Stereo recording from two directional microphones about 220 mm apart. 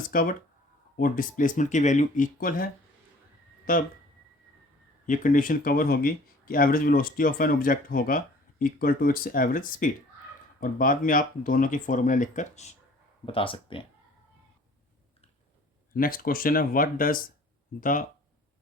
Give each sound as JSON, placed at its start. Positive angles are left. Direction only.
{"t": 0.1, "sound": "speech", "side_deg": 40}
{"t": 3.7, "sound": "speech", "side_deg": 40}
{"t": 5.0, "sound": "speech", "side_deg": 35}
{"t": 15.9, "sound": "speech", "side_deg": 40}